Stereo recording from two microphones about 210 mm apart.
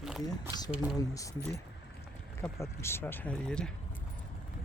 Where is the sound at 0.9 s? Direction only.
15° left (ahead or behind).